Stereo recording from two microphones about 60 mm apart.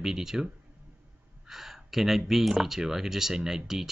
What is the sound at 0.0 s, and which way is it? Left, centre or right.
Speech, centre.